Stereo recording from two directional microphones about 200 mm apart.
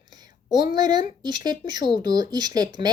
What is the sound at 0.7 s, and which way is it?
Speech, 20° right (ahead or behind).